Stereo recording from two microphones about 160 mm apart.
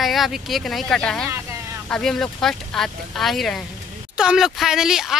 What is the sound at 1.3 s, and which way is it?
Speech, 20° right (ahead or behind).